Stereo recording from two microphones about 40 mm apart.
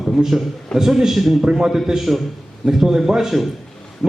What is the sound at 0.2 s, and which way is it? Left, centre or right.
A man's voice, centre.